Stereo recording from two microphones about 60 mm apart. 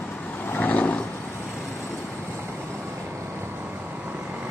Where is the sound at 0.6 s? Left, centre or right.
Left.